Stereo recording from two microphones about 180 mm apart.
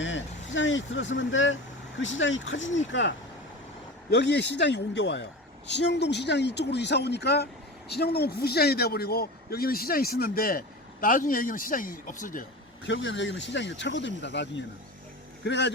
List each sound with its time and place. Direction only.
0.0 s speech: 90° left
4.1 s a woman's voice: 70° left (ahead or behind); by 12.5 s 50° left (ahead or behind)
12.8 s a woman's voice: 85° left